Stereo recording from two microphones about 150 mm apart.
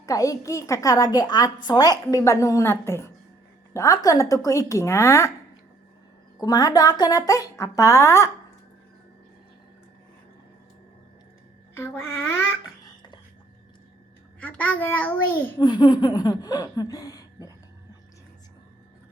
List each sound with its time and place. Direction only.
0.0 s a woman's voice: 20° left (ahead or behind)
6.4 s a woman's voice: 25° left (ahead or behind)
11.7 s a child's voice: 15° left (ahead or behind)
14.4 s a child's voice: 10° left (ahead or behind)
15.6 s a woman's voice: 30° left (ahead or behind)